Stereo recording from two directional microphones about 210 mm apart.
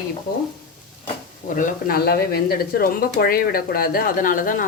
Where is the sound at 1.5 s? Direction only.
40° left (ahead or behind).